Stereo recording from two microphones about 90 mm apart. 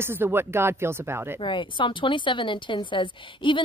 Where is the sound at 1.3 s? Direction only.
65° left (ahead or behind).